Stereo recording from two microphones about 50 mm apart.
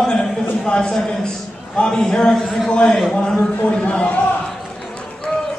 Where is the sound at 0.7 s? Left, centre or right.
Centre.